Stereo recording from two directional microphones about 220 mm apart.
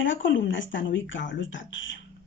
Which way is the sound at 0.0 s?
60° left (ahead or behind).